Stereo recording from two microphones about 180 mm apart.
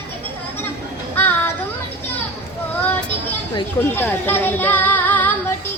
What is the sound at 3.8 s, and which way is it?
Speech, 10° left (ahead or behind).